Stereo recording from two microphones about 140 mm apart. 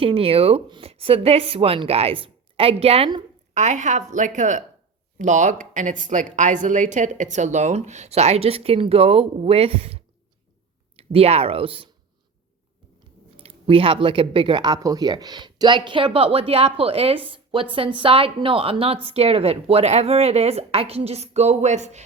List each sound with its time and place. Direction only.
0.0 s a woman's voice: 45° right (ahead or behind)
3.5 s a woman's voice: 60° right (ahead or behind); by 11.9 s 40° right (ahead or behind)
13.4 s a woman's voice: 45° right (ahead or behind)